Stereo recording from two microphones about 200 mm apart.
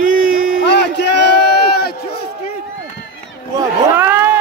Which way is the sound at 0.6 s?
60° left (ahead or behind).